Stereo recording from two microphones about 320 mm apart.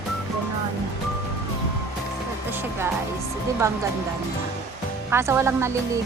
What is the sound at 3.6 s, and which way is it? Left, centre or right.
Speech, centre.